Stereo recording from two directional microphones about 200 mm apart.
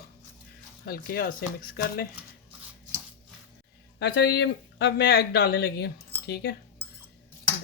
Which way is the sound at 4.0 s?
55° left (ahead or behind).